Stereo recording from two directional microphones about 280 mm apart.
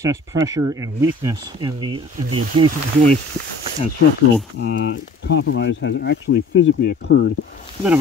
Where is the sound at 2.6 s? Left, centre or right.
Right.